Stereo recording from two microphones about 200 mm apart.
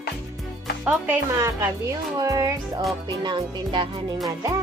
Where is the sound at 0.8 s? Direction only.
10° right (ahead or behind).